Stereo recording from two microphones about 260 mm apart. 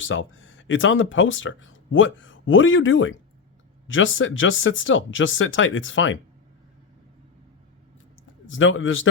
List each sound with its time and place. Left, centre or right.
0.0 s speech: left
8.4 s speech: left